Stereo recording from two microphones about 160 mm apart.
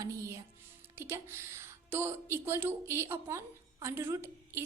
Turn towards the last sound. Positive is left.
turn(degrees=-15)  # may be behind; listen again after turning